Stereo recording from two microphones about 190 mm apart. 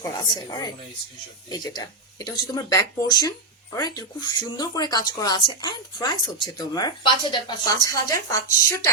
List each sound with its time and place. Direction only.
0.0 s speech: 20° left (ahead or behind)